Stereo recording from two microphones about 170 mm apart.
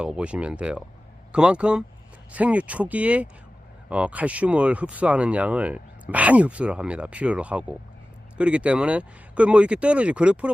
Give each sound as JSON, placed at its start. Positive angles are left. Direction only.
{"t": 0.0, "sound": "speech", "side_deg": -5}